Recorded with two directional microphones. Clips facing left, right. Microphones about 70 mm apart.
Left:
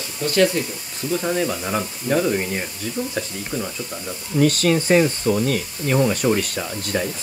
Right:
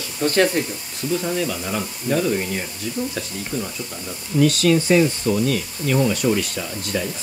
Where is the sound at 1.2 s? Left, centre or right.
Left.